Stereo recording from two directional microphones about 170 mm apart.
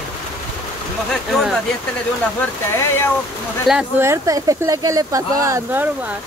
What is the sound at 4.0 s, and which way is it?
Speech, 20° right (ahead or behind).